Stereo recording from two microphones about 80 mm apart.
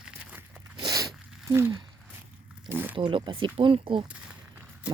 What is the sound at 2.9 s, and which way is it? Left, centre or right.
Speech, right.